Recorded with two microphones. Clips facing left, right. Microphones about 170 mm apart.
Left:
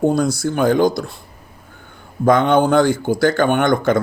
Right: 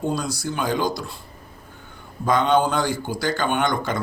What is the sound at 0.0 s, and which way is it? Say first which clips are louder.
A man's voice: left 9 dB; 55° left (ahead or behind).